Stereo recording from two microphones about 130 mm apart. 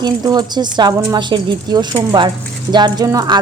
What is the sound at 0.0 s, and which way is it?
Speech, 30° right (ahead or behind).